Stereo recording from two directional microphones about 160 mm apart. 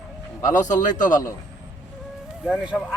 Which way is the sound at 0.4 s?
50° left (ahead or behind).